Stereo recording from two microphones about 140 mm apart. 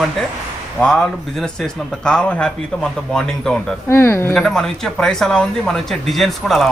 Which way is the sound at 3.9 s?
15° left (ahead or behind).